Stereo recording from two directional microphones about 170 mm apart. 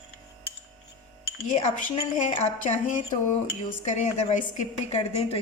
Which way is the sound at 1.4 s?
45° left (ahead or behind).